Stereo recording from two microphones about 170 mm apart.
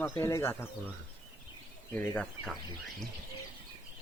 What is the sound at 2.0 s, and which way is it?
Speech, 5° left (ahead or behind).